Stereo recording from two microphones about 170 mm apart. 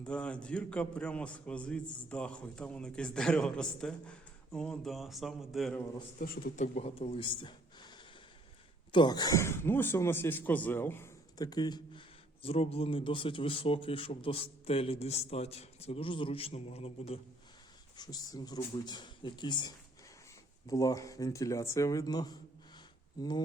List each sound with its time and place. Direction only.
0.0 s a man's voice: 5° left (ahead or behind)
6.1 s a man's voice: 60° left (ahead or behind)
6.6 s speech: 40° left (ahead or behind)
17.9 s speech: 25° left (ahead or behind)